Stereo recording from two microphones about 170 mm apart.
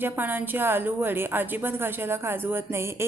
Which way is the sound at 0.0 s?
10° right (ahead or behind).